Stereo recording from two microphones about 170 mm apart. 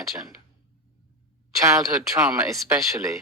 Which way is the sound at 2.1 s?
15° right (ahead or behind).